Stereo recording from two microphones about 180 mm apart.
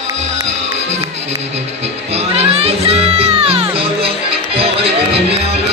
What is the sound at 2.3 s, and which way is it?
Music, 35° right (ahead or behind).